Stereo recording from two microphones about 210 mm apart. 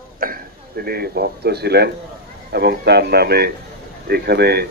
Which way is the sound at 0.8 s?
50° right (ahead or behind).